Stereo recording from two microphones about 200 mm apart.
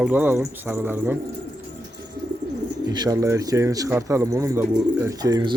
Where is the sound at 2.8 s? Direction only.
20° right (ahead or behind).